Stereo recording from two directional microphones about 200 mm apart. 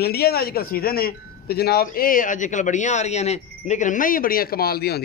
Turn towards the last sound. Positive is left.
turn(degrees=50)  # may be behind; listen again after turning